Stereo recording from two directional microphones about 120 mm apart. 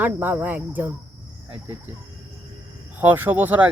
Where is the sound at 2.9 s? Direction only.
15° right (ahead or behind).